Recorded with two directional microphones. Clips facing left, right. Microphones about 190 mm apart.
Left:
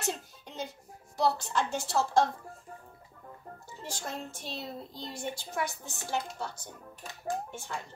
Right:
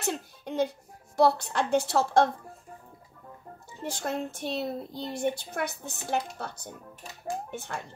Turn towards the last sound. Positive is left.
turn(degrees=-65)  # may be behind; listen again after turning